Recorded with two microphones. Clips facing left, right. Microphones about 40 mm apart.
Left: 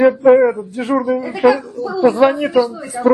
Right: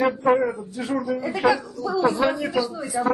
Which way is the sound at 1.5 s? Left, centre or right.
Left.